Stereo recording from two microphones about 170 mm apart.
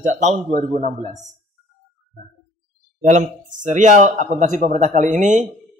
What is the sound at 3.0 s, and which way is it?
Speech, 45° right (ahead or behind).